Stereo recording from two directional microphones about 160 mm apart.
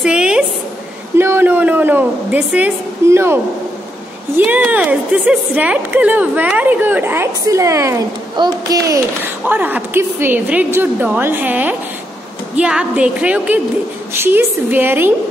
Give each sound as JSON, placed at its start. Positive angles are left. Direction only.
{"t": 0.0, "sound": "a sound", "side_deg": -5}
{"t": 1.1, "sound": "a woman's voice", "side_deg": -15}
{"t": 4.4, "sound": "a woman's voice", "side_deg": -10}
{"t": 9.4, "sound": "a woman's voice", "side_deg": -10}